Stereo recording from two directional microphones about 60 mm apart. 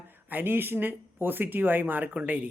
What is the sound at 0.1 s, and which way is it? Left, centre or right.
Speech, right.